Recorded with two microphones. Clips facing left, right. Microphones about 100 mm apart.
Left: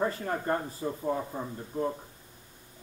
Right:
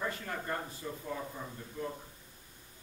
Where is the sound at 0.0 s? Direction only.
35° left (ahead or behind).